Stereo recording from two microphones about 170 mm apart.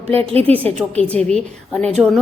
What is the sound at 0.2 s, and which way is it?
Speech, 35° right (ahead or behind).